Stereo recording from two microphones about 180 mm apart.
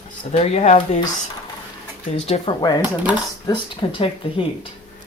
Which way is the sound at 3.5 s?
30° left (ahead or behind).